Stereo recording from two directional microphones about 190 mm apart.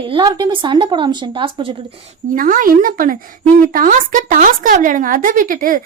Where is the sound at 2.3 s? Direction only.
45° right (ahead or behind).